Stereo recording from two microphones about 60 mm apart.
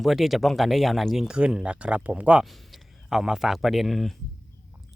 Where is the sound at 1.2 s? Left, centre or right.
Centre.